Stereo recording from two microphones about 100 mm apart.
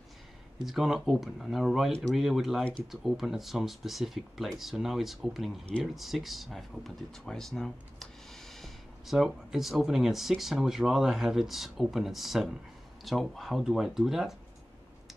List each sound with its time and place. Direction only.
0.7 s speech: centre (ahead or behind)